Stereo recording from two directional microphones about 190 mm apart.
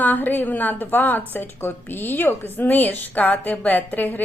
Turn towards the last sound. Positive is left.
turn(degrees=10)  # may be behind; listen again after turning